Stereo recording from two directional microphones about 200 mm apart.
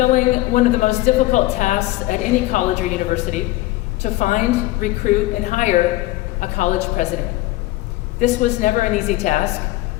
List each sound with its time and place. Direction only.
0.0 s a woman's voice: 40° left (ahead or behind)
8.2 s a woman's voice: 35° left (ahead or behind)